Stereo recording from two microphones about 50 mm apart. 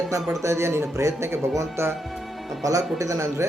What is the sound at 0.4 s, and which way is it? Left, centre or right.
Speech, right.